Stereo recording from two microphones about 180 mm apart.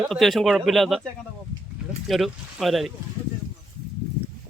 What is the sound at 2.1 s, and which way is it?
Speech, centre (ahead or behind).